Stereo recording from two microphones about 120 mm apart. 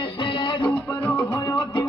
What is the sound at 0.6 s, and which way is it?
Music, 15° left (ahead or behind).